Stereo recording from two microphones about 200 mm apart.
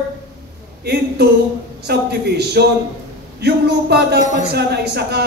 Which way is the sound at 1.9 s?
55° right (ahead or behind).